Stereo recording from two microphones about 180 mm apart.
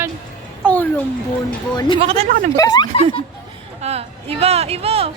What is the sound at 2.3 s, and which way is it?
Speech, 50° right (ahead or behind).